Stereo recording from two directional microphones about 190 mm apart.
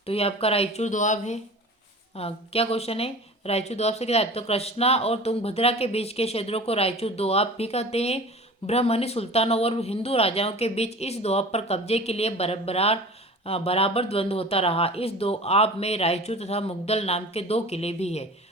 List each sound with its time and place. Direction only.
0.0 s speech: 30° left (ahead or behind)